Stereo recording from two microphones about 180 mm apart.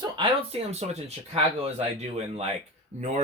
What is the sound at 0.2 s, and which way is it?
Speech, 35° right (ahead or behind).